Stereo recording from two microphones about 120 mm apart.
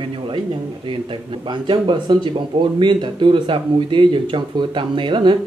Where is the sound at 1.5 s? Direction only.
40° right (ahead or behind).